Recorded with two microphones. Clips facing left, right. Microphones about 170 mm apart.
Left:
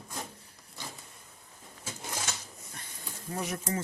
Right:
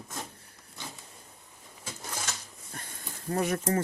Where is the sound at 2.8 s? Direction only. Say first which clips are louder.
Right 7 dB; 50° right (ahead or behind).